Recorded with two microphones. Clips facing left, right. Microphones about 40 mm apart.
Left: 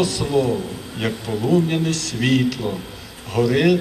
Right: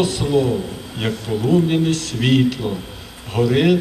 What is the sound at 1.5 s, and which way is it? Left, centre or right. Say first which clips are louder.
A man's voice: right 2 dB; right.